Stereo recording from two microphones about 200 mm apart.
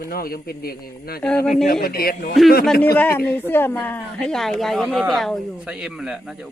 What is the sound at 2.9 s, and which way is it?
A man's voice, 10° left (ahead or behind).